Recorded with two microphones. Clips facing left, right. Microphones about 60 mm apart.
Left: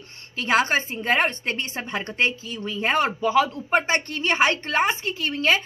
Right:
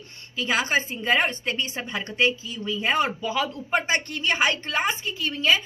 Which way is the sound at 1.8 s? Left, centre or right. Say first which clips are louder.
Left 2 dB; left.